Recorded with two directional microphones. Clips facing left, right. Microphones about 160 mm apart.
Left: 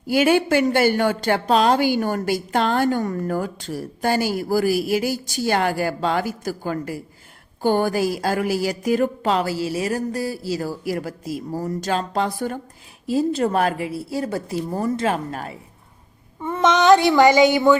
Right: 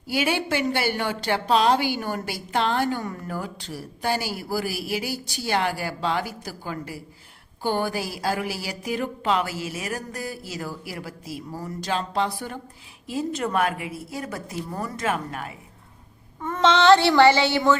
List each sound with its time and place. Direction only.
0.1 s a woman's voice: 50° left (ahead or behind)
13.1 s a woman's voice: 35° left (ahead or behind)
16.4 s child singing: 10° left (ahead or behind)